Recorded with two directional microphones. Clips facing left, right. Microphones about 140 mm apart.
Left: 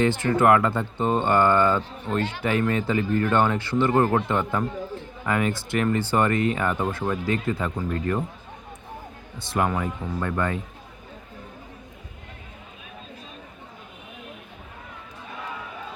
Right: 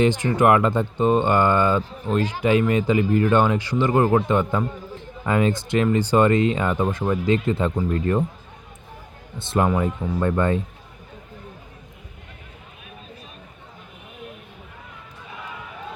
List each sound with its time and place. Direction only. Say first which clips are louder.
0.0 s speech: right 2 dB; 20° right (ahead or behind)
9.4 s speech: right 4 dB; 25° right (ahead or behind)